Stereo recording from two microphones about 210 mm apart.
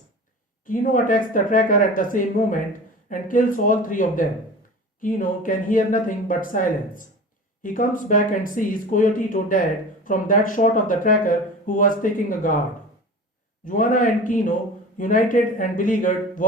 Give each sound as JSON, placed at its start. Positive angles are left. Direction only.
{"t": 0.6, "sound": "speech", "side_deg": 40}
{"t": 13.7, "sound": "speech", "side_deg": 40}